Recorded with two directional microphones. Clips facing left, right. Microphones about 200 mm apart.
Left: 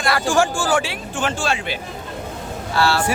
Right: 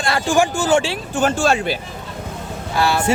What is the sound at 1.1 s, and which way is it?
Speech, 40° right (ahead or behind).